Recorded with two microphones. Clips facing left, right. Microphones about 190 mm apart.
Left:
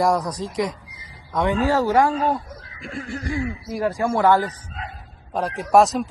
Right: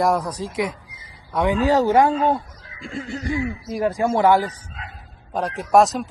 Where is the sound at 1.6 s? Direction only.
20° right (ahead or behind).